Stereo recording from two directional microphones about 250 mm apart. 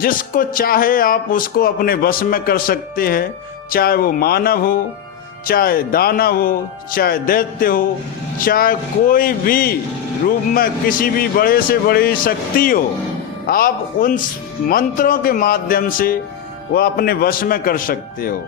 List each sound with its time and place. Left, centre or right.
0.0 s speech: left